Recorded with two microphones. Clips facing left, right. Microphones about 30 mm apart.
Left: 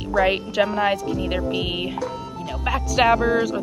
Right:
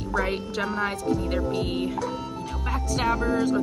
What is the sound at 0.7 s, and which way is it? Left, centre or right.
Speech, centre.